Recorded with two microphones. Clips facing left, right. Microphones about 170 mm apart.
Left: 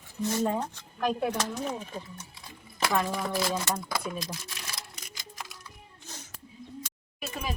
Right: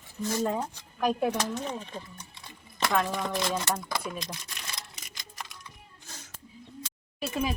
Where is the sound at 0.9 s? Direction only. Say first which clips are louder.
Right 2 dB; 5° right (ahead or behind).